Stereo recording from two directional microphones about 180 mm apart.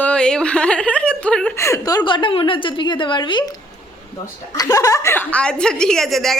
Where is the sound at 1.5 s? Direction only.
15° left (ahead or behind).